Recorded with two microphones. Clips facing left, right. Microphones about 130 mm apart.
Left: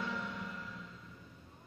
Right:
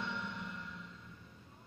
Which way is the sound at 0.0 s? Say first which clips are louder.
Left 2 dB; centre (ahead or behind).